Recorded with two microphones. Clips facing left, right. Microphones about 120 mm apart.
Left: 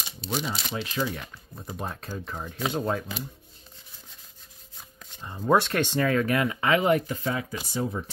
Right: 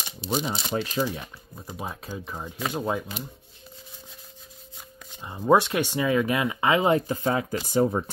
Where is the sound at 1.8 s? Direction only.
5° right (ahead or behind).